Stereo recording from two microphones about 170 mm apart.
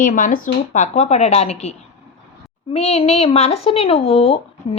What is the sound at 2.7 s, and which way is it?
A woman's voice, 40° left (ahead or behind).